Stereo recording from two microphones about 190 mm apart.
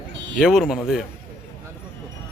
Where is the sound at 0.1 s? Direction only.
80° right.